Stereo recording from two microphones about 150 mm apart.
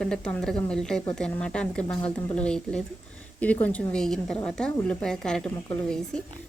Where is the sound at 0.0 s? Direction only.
5° left (ahead or behind).